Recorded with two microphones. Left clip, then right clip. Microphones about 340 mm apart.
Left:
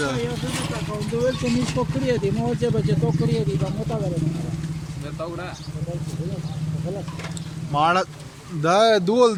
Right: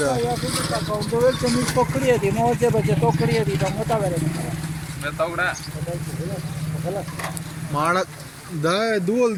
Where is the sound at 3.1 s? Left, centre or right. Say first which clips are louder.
Right 4 dB; right.